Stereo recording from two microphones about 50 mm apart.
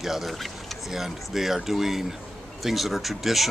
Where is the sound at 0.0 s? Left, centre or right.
Centre.